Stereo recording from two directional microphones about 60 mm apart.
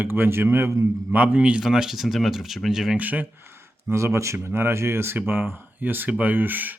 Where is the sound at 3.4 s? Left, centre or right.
Right.